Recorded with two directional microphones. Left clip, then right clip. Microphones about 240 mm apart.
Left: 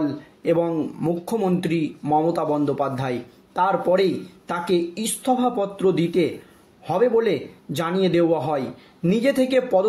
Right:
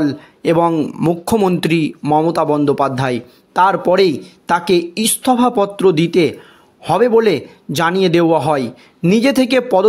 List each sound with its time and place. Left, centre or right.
0.0 s speech: right